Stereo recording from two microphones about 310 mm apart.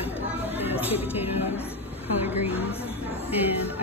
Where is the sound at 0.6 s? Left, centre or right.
Centre.